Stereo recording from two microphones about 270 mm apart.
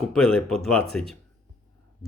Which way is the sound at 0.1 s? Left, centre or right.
Centre.